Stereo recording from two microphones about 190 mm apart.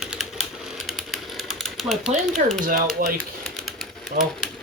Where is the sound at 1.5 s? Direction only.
Centre (ahead or behind).